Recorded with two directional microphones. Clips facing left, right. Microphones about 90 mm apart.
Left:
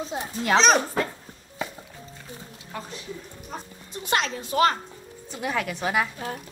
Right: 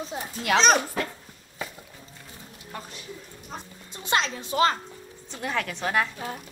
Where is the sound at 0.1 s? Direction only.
30° left (ahead or behind).